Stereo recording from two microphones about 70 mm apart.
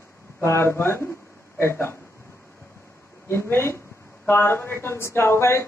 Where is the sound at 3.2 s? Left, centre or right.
Left.